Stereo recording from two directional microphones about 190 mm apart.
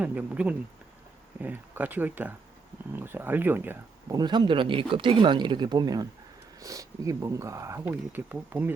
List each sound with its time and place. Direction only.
0.0 s speech: 10° right (ahead or behind)
4.2 s speech: 25° right (ahead or behind)